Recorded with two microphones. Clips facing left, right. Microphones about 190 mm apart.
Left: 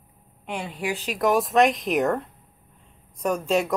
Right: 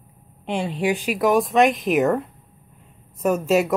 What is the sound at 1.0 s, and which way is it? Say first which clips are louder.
Speech: right 1 dB; 5° right (ahead or behind).